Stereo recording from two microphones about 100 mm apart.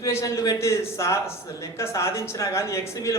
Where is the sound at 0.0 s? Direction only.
30° left (ahead or behind).